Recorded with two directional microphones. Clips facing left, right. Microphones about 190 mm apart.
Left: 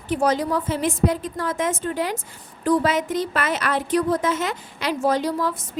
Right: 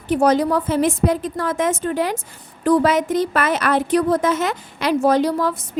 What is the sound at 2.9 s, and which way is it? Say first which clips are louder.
Speech: right 5 dB; 45° right (ahead or behind).